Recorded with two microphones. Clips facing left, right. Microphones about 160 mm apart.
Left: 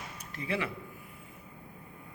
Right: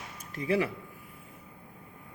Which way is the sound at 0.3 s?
35° right (ahead or behind).